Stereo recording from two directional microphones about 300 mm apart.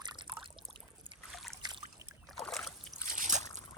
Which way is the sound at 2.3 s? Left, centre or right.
Centre.